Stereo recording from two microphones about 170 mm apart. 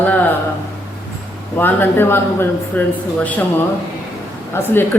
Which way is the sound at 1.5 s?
10° left (ahead or behind).